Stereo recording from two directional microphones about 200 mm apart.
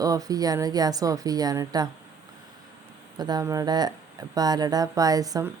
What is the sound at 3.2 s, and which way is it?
A woman's voice, 20° right (ahead or behind).